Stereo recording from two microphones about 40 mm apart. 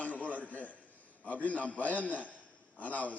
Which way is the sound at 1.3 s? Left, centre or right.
Left.